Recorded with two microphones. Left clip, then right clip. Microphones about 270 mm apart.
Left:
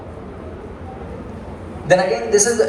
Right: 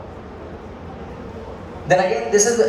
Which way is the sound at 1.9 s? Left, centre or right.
Left.